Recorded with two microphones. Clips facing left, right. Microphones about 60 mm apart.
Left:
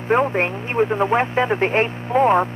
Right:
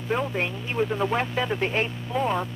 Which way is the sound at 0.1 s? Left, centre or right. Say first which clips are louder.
Left 8 dB; left.